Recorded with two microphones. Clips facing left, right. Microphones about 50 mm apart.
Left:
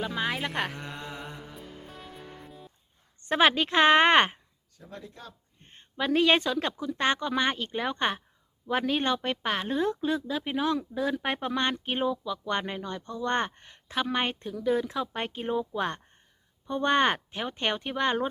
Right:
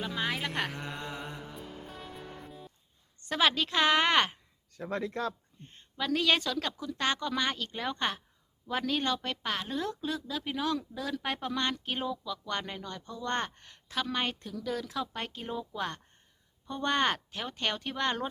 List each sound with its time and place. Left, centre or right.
0.0 s speech: centre
0.7 s music: centre
3.2 s speech: left
4.8 s speech: right
5.5 s speech: left